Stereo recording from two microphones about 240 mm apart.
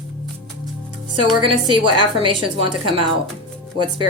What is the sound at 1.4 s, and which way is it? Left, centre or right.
A woman's voice, centre.